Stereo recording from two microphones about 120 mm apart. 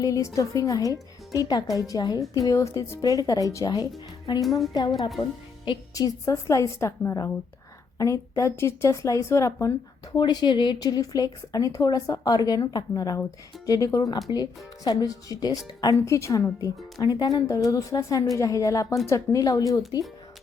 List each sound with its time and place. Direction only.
0.0 s a woman's voice: 30° left (ahead or behind)
4.4 s a woman's voice: centre (ahead or behind)
5.9 s a woman's voice: 25° left (ahead or behind)
10.2 s a woman's voice: 40° left (ahead or behind)